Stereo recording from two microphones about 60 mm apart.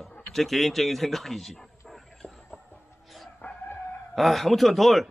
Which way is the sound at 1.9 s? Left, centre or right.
Centre.